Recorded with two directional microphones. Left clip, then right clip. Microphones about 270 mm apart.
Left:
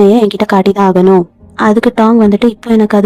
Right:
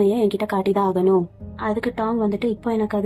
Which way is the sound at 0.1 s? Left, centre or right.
Left.